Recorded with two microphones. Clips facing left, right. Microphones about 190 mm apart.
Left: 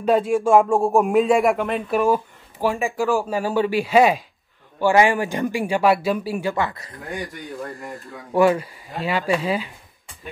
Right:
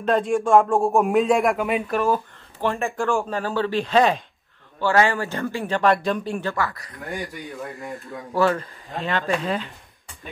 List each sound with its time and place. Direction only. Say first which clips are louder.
0.0 s speech: left 2 dB; 5° left (ahead or behind)
1.9 s speech: left 3 dB; 10° left (ahead or behind)
6.5 s speech: left 2 dB; 20° left (ahead or behind)
7.3 s speech: left 1 dB; centre (ahead or behind)
8.4 s speech: left 4 dB; 10° left (ahead or behind)